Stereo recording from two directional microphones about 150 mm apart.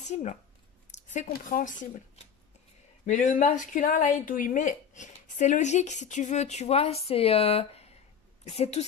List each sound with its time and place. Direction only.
0.0 s speech: 50° left (ahead or behind)
3.1 s speech: 55° left (ahead or behind)